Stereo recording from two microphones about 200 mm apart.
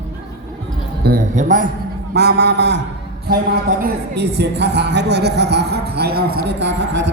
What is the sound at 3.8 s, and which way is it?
A man's voice, 55° right (ahead or behind).